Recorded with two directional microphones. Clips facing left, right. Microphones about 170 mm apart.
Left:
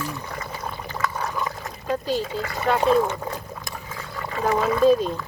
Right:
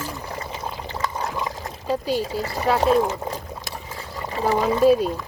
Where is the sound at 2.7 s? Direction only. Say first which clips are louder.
Right 1 dB; 5° right (ahead or behind).